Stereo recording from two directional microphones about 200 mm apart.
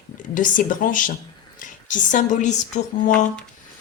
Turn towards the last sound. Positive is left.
turn(degrees=35)  # may be behind; listen again after turning